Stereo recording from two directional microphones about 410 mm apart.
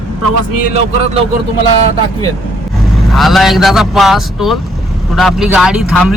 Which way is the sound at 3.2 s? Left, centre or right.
Centre.